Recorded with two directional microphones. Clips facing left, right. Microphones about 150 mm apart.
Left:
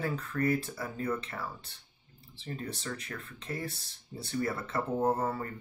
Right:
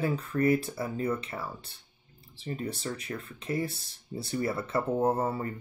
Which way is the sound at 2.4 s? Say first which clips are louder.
Right 4 dB; 15° right (ahead or behind).